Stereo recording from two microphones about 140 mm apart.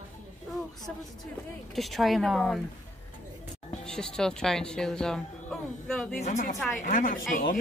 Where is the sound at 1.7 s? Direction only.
Centre (ahead or behind).